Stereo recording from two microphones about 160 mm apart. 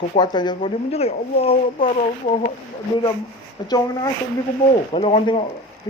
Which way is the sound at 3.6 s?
25° left (ahead or behind).